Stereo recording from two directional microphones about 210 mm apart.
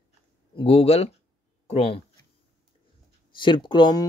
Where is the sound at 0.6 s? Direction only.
25° left (ahead or behind).